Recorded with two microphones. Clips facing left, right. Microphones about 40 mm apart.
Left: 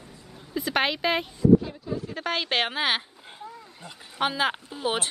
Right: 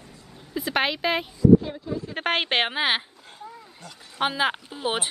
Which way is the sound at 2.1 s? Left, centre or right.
Right.